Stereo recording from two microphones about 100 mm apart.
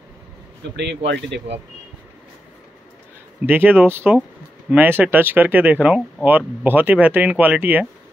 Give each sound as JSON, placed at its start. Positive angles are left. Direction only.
{"t": 3.4, "sound": "speech", "side_deg": -20}